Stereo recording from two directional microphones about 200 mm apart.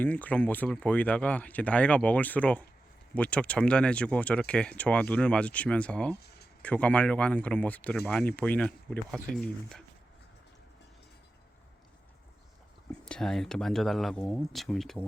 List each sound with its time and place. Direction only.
0.0 s speech: 10° left (ahead or behind)
6.2 s a sound: 55° left (ahead or behind)
6.6 s speech: 5° left (ahead or behind)
12.9 s speech: 5° left (ahead or behind)